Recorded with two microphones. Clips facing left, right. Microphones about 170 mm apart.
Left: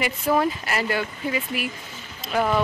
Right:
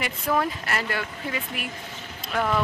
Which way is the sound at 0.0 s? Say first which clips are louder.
Left 4 dB; 5° left (ahead or behind).